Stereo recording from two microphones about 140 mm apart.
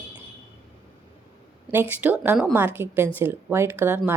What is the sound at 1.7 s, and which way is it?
Speech, 15° right (ahead or behind).